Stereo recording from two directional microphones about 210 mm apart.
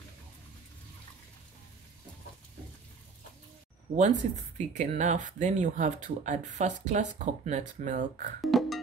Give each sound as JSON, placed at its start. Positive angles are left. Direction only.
{"t": 3.9, "sound": "speech", "side_deg": -30}
{"t": 8.4, "sound": "music", "side_deg": 0}